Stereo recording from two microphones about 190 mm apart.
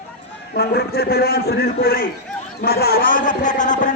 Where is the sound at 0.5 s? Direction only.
55° left (ahead or behind).